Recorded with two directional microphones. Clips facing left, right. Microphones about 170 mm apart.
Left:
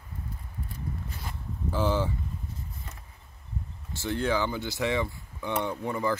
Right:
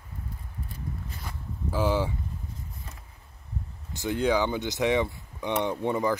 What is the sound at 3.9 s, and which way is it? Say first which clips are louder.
Speech: right 3 dB; 15° right (ahead or behind).